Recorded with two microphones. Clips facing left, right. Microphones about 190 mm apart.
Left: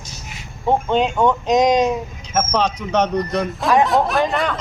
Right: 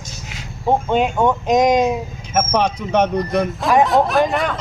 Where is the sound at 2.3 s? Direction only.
15° right (ahead or behind).